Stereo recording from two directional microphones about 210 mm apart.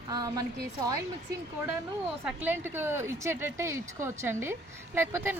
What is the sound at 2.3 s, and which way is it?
A woman's voice, 10° right (ahead or behind).